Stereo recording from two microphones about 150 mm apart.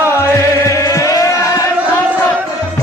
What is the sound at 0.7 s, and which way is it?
Chant, 20° left (ahead or behind).